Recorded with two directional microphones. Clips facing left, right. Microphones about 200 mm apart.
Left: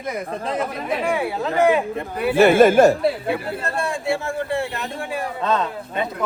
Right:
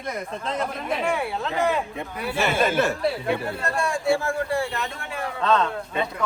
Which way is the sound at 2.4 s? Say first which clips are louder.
Left 10 dB; 55° left (ahead or behind).